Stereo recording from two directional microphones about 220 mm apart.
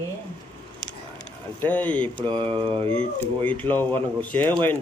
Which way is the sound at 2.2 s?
20° right (ahead or behind).